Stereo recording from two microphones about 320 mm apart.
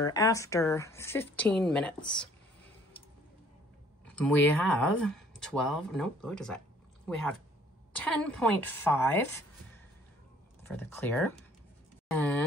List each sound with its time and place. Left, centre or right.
0.0 s speech: centre
4.1 s speech: centre
10.6 s speech: centre